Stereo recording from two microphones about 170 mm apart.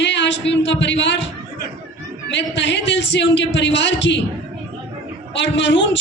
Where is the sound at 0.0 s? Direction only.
90° left.